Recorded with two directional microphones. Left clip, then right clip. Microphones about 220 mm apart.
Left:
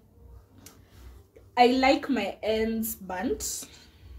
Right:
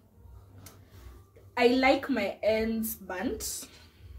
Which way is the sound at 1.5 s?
20° left (ahead or behind).